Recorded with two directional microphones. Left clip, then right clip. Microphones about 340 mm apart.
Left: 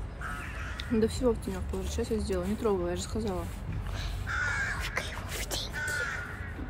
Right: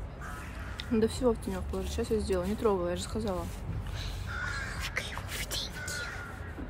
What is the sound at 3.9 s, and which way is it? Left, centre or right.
Crow, centre.